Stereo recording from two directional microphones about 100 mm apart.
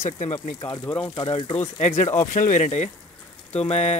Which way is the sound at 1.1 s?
55° left (ahead or behind).